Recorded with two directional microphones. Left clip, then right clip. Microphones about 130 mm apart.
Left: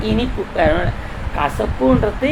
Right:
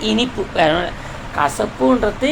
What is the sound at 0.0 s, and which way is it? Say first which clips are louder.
A woman's voice: right 2 dB; 45° right (ahead or behind).